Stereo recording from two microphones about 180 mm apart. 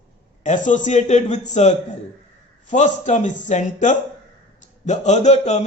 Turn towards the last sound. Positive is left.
turn(degrees=40)  # may be behind; listen again after turning